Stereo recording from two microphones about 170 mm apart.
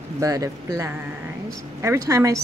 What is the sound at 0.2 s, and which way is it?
A woman's voice, 20° right (ahead or behind).